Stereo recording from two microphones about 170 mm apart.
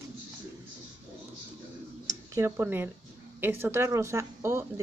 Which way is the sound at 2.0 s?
15° right (ahead or behind).